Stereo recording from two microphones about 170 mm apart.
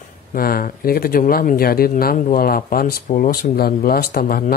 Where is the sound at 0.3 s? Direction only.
60° left (ahead or behind).